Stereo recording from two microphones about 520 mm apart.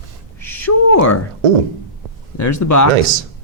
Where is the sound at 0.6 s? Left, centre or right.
Left.